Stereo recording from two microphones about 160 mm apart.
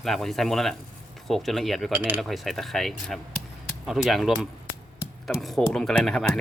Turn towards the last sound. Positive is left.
turn(degrees=5)  # may be behind; listen again after turning